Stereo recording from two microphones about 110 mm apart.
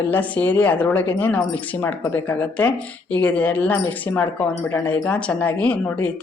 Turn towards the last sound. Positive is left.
turn(degrees=15)  # may be behind; listen again after turning